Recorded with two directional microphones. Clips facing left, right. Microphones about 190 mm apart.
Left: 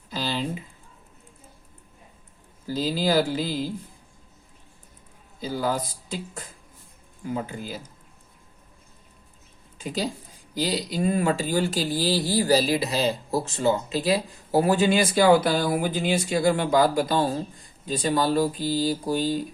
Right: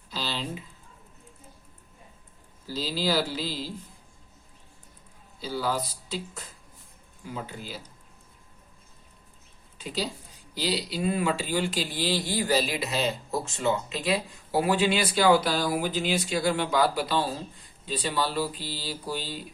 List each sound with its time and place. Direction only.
0.1 s a sound: 50° left (ahead or behind)
2.6 s speech: 50° left (ahead or behind)
5.4 s speech: 50° left (ahead or behind)
9.7 s speech: 50° left (ahead or behind)